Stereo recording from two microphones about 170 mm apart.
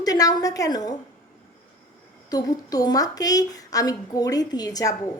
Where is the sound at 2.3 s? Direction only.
20° left (ahead or behind).